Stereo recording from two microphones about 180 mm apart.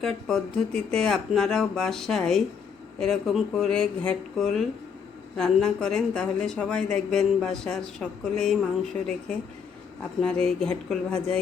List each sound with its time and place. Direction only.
0.0 s a woman's voice: 5° left (ahead or behind)